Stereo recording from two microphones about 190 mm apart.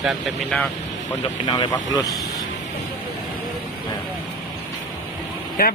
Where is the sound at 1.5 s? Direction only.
25° left (ahead or behind).